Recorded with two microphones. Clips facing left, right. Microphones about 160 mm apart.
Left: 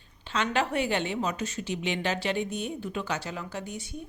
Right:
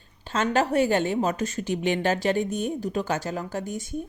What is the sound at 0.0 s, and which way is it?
A woman's voice, 45° right (ahead or behind).